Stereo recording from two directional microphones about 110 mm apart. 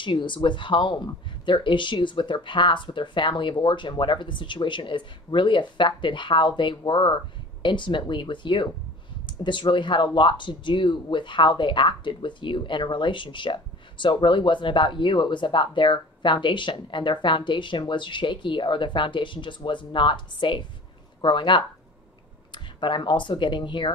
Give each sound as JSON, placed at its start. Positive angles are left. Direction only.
{"t": 0.0, "sound": "speech", "side_deg": 45}